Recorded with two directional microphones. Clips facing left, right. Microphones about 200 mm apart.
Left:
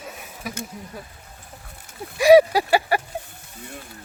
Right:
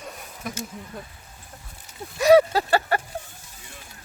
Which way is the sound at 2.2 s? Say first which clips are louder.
Left 3 dB; 15° left (ahead or behind).